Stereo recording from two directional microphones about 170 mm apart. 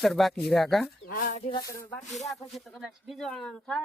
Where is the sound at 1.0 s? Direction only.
60° left (ahead or behind).